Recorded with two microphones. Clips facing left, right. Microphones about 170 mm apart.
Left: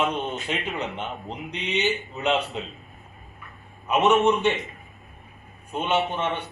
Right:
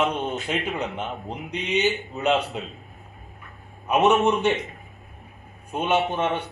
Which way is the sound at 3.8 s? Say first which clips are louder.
Right 1 dB; 15° right (ahead or behind).